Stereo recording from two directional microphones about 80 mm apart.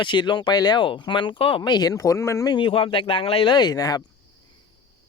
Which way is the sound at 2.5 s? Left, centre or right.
Left.